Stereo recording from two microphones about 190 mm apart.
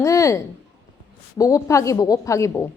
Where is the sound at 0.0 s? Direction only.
15° left (ahead or behind).